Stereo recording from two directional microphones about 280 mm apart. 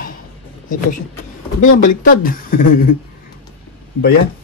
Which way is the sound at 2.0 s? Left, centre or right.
Left.